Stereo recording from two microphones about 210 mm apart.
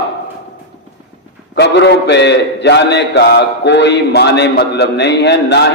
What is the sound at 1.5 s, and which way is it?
A man's voice, 55° left (ahead or behind).